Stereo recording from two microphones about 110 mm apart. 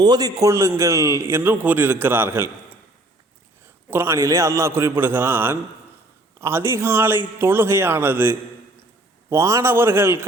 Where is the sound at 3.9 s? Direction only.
25° right (ahead or behind).